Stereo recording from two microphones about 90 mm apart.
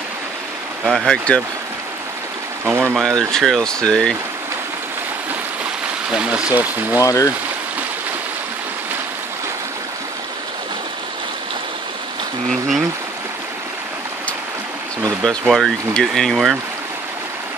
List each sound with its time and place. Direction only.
0.8 s speech: 5° left (ahead or behind)
2.6 s speech: 25° right (ahead or behind)
2.9 s speech: centre (ahead or behind)
6.1 s speech: 10° right (ahead or behind)
7.0 s speech: 40° left (ahead or behind)
12.4 s speech: centre (ahead or behind)
15.2 s speech: centre (ahead or behind)